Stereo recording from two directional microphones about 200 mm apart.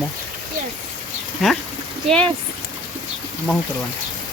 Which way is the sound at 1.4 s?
Centre (ahead or behind).